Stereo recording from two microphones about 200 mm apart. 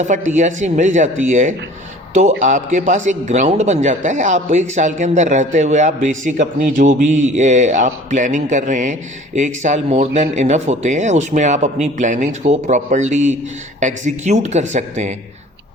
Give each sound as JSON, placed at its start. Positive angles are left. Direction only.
{"t": 0.0, "sound": "a man's voice", "side_deg": -40}